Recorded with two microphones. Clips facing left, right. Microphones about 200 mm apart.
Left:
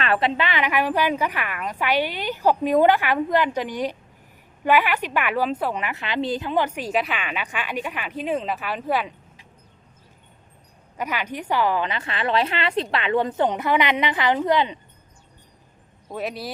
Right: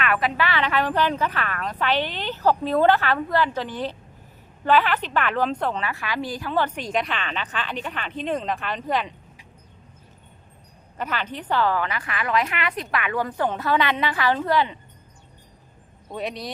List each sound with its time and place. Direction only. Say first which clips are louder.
0.0 s a woman's voice: left 1 dB; 30° left (ahead or behind); by 9.1 s 5° left (ahead or behind)
10.9 s a woman's voice: left 1 dB; 10° left (ahead or behind)
16.1 s speech: left 1 dB; 5° left (ahead or behind)